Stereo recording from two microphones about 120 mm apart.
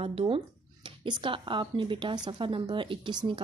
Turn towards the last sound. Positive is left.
turn(degrees=-40)  # may be behind; listen again after turning